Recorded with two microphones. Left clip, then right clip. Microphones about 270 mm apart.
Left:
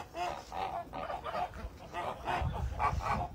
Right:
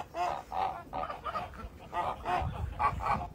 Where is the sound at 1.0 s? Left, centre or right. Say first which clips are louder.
Left 2 dB; left.